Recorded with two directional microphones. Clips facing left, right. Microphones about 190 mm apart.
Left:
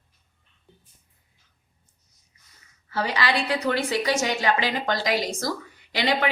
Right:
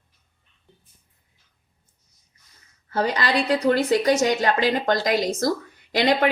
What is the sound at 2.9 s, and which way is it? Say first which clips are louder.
A woman's voice: right 3 dB; 45° right (ahead or behind).